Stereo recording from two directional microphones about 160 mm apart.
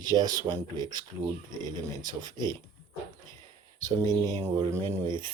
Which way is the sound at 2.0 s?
25° right (ahead or behind).